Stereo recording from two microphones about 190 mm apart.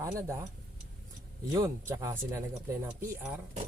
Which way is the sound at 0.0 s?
15° right (ahead or behind).